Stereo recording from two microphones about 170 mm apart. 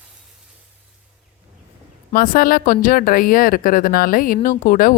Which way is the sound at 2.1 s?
60° left (ahead or behind).